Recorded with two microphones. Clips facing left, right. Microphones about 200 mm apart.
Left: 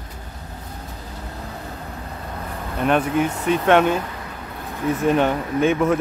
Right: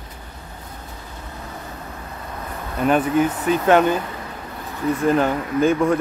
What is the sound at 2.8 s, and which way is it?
Speech, centre (ahead or behind).